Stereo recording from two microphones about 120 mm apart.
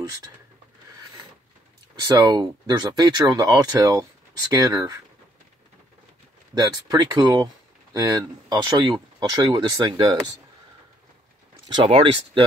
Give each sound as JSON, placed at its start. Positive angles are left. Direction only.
{"t": 2.0, "sound": "speech", "side_deg": -35}
{"t": 6.5, "sound": "speech", "side_deg": -35}
{"t": 11.6, "sound": "speech", "side_deg": -40}